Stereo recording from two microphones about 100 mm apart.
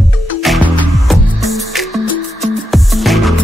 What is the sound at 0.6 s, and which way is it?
Music, 15° left (ahead or behind).